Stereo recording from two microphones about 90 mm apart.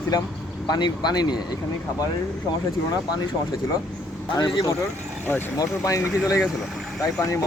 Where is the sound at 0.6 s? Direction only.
50° left (ahead or behind).